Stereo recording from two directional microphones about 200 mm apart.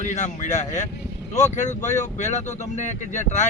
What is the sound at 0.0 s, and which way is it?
Speech, 35° left (ahead or behind).